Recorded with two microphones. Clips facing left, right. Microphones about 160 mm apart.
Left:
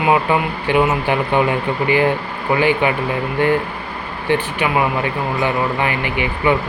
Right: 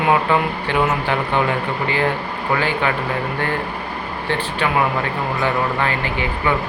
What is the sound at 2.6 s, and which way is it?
Speech, 15° left (ahead or behind).